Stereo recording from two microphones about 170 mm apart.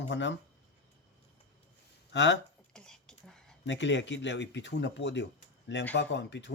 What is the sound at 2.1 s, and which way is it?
Speech, 90° left.